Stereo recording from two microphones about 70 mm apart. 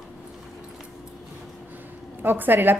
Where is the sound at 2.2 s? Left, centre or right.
Right.